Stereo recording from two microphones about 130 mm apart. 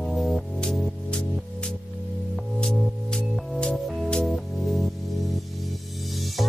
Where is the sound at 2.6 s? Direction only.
5° left (ahead or behind).